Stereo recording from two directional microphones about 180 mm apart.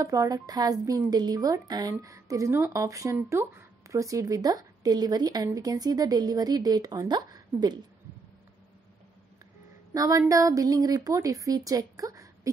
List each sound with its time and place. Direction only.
0.0 s speech: 20° right (ahead or behind)
9.9 s speech: 20° right (ahead or behind)